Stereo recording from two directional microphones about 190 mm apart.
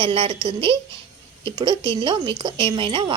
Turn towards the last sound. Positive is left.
turn(degrees=-25)  # may be behind; listen again after turning